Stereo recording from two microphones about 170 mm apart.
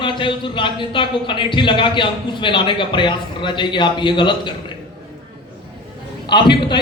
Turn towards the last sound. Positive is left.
turn(degrees=30)  # may be behind; listen again after turning